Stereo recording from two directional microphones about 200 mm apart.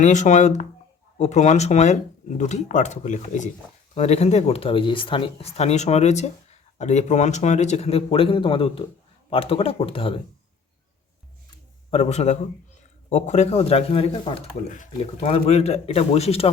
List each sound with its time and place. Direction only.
0.0 s speech: 35° left (ahead or behind)
11.9 s speech: 30° left (ahead or behind)